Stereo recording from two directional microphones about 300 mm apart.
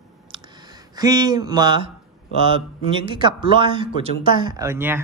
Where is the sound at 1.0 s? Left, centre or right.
Centre.